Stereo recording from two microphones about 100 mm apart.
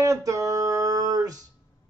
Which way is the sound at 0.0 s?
35° right (ahead or behind).